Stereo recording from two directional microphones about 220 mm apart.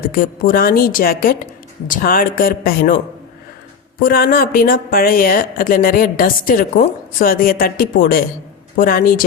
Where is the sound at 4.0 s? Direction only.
40° left (ahead or behind).